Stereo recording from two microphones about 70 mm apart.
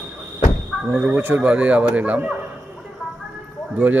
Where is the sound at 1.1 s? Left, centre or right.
Right.